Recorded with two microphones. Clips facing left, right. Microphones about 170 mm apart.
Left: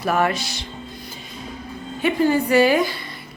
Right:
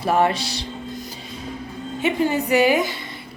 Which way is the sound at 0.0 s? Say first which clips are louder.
Right 1 dB; 25° right (ahead or behind).